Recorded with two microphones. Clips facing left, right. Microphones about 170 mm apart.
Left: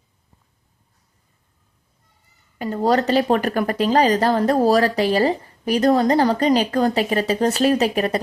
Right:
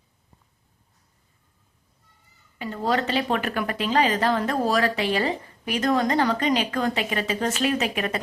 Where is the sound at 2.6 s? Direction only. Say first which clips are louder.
Left 6 dB; 40° left (ahead or behind).